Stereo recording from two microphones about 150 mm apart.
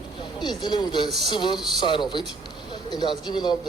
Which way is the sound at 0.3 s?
30° left (ahead or behind).